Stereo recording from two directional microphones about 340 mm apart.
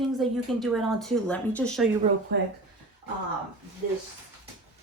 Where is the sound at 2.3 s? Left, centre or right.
Right.